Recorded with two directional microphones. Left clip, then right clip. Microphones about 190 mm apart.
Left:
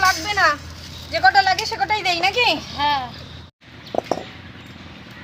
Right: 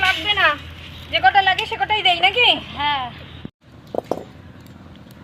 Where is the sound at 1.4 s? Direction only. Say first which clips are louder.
Right 1 dB; 5° right (ahead or behind).